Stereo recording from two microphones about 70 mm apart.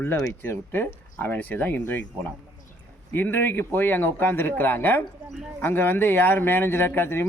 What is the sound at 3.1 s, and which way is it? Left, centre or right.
Speech, left.